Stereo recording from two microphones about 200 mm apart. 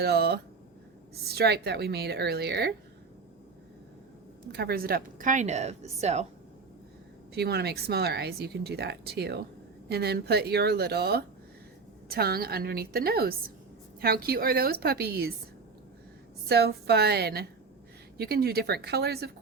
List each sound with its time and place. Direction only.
0.0 s speech: 55° right (ahead or behind)
4.5 s speech: 50° right (ahead or behind); by 6.2 s 35° right (ahead or behind)
7.3 s speech: 55° right (ahead or behind)
16.5 s speech: 55° right (ahead or behind)